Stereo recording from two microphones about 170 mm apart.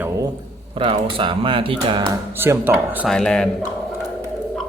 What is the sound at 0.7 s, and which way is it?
Speech, 30° right (ahead or behind).